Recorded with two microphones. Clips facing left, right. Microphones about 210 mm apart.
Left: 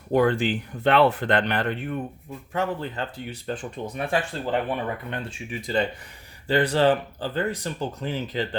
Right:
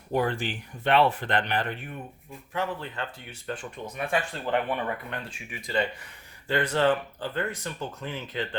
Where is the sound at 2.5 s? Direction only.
40° left (ahead or behind).